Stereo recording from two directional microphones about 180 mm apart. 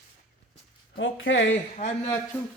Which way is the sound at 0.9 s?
90° left.